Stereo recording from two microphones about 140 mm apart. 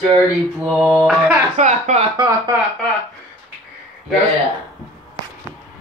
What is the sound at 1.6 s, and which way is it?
Speech, 55° right (ahead or behind).